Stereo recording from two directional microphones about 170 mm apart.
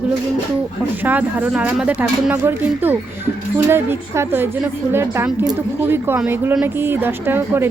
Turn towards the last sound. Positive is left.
turn(degrees=-15)  # may be behind; listen again after turning